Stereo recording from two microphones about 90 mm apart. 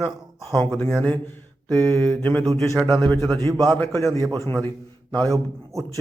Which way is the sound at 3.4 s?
45° right (ahead or behind).